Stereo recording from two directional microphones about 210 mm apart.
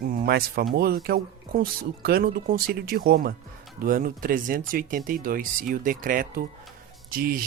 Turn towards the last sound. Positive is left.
turn(degrees=-45)  # may be behind; listen again after turning